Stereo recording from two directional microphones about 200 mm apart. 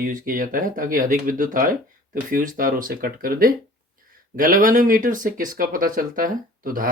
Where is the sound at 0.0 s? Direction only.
40° right (ahead or behind).